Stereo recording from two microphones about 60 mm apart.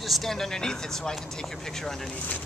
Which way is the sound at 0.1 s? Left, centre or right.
Centre.